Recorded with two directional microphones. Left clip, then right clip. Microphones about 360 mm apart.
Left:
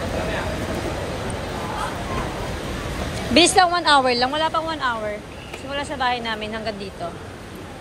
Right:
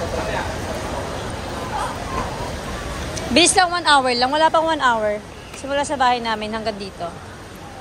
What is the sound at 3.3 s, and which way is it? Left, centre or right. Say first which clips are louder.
A woman's voice: even; centre.